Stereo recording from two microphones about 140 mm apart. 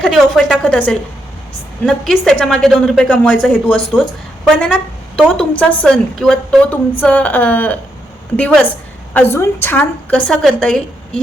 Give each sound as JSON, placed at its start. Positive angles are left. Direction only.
{"t": 0.0, "sound": "a woman's voice", "side_deg": 5}
{"t": 0.7, "sound": "a woman's voice", "side_deg": 10}
{"t": 4.5, "sound": "a sound", "side_deg": 0}
{"t": 5.4, "sound": "a woman's voice", "side_deg": 10}